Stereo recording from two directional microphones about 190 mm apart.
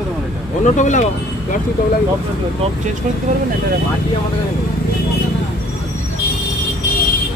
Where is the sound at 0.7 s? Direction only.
40° left (ahead or behind).